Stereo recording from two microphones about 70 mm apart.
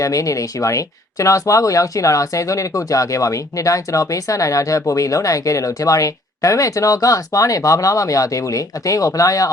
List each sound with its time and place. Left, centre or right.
0.0 s speech: left